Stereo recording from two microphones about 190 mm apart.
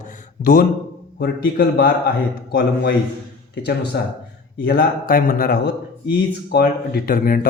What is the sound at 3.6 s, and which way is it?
Speech, 60° left (ahead or behind).